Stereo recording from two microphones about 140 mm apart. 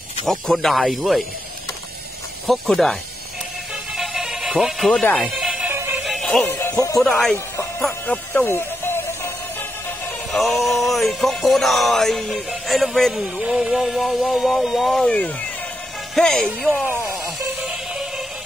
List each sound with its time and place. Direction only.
0.3 s music: centre (ahead or behind)
2.4 s music: centre (ahead or behind)
6.6 s speech: 20° left (ahead or behind)
7.0 s music: centre (ahead or behind)
10.3 s music: centre (ahead or behind)
16.7 s speech: 10° right (ahead or behind)
17.6 s music: 5° right (ahead or behind)